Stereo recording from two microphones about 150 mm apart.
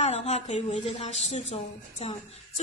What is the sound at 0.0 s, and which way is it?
A woman's voice, 45° left (ahead or behind).